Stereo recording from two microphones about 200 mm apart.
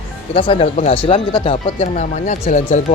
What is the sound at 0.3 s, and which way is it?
Speech, 25° left (ahead or behind).